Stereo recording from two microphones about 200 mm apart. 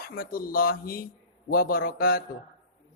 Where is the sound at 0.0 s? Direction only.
45° left (ahead or behind).